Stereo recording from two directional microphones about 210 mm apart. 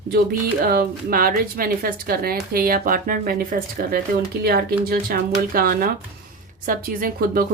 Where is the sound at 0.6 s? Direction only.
45° right (ahead or behind).